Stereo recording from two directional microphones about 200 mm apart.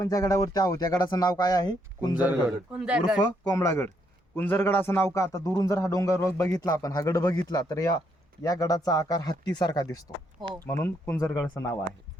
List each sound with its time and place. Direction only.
0.0 s speech: 15° left (ahead or behind)
2.7 s speech: 5° right (ahead or behind)
3.2 s a man's voice: 20° left (ahead or behind)